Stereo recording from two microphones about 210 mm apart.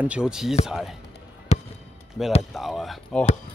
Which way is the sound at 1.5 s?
30° left (ahead or behind).